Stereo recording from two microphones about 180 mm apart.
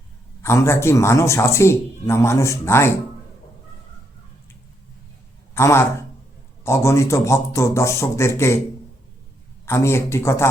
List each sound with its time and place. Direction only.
0.4 s speech: 15° left (ahead or behind)
5.5 s speech: 15° left (ahead or behind)
9.6 s speech: 15° left (ahead or behind)